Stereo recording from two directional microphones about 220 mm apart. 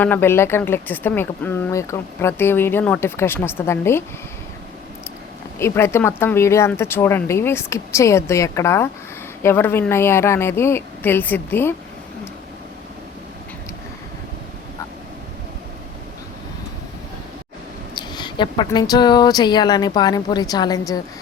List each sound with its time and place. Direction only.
0.0 s speech: 10° left (ahead or behind)
5.5 s speech: 10° left (ahead or behind)
17.9 s speech: 20° left (ahead or behind)